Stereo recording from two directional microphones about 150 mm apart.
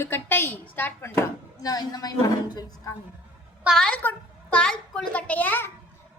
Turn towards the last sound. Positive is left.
turn(degrees=10)  # may be behind; listen again after turning